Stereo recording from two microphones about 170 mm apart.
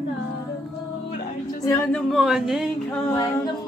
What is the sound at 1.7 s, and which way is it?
Speech, 15° left (ahead or behind).